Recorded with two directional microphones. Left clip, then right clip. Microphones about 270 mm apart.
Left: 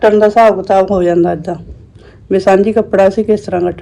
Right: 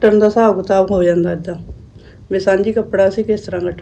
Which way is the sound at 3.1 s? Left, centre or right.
Centre.